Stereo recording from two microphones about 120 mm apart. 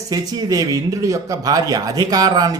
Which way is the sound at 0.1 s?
30° right (ahead or behind).